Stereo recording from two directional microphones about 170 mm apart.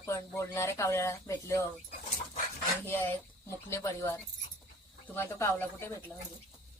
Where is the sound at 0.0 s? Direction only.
15° left (ahead or behind).